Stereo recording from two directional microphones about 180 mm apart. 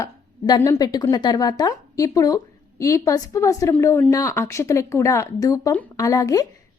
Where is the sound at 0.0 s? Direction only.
20° left (ahead or behind).